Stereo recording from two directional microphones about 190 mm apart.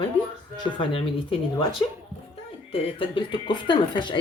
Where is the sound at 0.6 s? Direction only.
30° left (ahead or behind).